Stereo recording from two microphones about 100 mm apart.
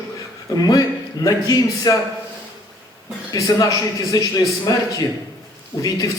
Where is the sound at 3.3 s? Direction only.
40° left (ahead or behind).